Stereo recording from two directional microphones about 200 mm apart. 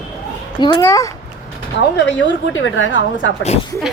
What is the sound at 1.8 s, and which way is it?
A woman's voice, 65° left (ahead or behind).